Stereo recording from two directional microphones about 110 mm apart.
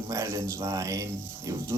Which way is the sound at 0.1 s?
25° right (ahead or behind).